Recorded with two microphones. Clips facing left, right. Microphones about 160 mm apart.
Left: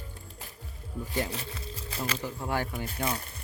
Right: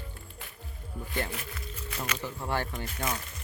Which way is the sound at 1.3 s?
30° left (ahead or behind).